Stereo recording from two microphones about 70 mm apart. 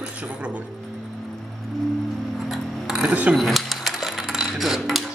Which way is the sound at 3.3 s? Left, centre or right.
Centre.